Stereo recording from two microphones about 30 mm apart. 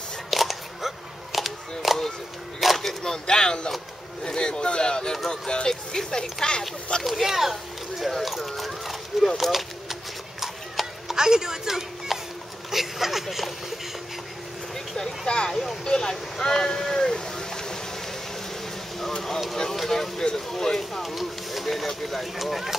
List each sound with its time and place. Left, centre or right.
0.3 s music: centre
2.6 s a sound: centre
3.0 s speech: left
7.0 s speech: centre
7.2 s speech: centre
10.4 s clip-clop: centre
11.1 s speech: right
15.2 s speech: left
15.5 s speech: centre
15.8 s speech: centre
19.5 s speech: centre
21.0 s speech: centre